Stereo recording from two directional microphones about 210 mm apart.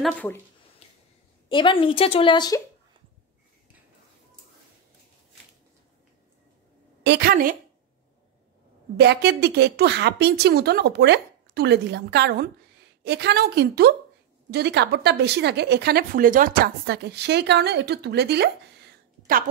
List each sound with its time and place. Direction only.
0.0 s speech: 5° left (ahead or behind)
1.5 s speech: 25° left (ahead or behind)
7.0 s a woman's voice: 55° right (ahead or behind)
8.9 s speech: 50° right (ahead or behind)